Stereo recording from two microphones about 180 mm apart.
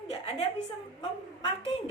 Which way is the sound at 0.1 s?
35° left (ahead or behind).